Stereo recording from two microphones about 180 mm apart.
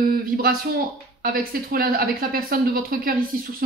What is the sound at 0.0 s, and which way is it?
A woman's voice, 55° right (ahead or behind).